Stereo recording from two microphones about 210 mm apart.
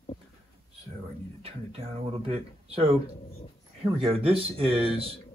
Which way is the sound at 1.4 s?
25° right (ahead or behind).